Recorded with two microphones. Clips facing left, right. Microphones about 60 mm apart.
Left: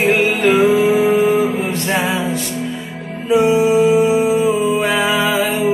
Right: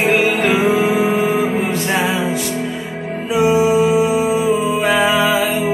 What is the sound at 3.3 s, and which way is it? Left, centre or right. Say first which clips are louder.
Music: left 1 dB; centre.